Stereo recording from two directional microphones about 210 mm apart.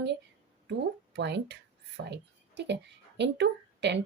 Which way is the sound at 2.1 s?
55° right (ahead or behind).